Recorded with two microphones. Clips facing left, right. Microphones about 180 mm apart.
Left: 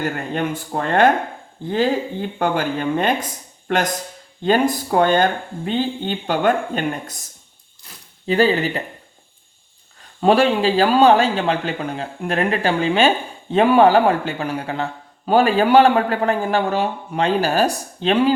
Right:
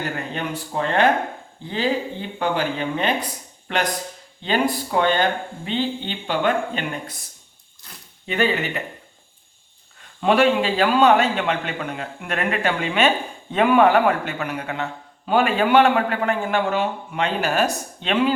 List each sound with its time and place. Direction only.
0.3 s speech: 50° left (ahead or behind)
8.3 s a man's voice: 35° left (ahead or behind)
10.2 s a man's voice: 35° left (ahead or behind)